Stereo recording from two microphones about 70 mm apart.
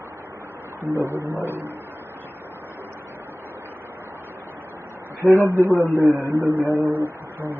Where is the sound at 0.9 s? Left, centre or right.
Right.